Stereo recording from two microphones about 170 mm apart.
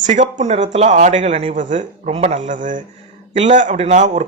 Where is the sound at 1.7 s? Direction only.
45° right (ahead or behind).